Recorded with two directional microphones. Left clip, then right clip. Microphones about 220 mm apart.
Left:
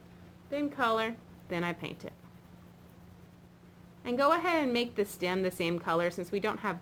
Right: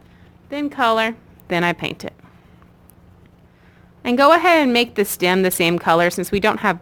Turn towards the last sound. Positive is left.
turn(degrees=-45)  # may be behind; listen again after turning